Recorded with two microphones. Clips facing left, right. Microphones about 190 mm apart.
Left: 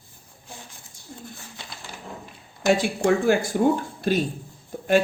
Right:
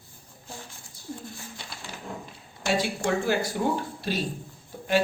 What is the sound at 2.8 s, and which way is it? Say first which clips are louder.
A man's voice: left 5 dB; 50° left (ahead or behind).